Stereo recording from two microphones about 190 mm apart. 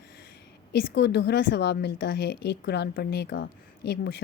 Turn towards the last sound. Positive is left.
turn(degrees=60)  # may be behind; listen again after turning